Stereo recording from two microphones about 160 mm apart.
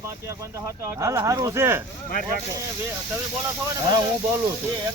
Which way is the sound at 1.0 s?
20° right (ahead or behind).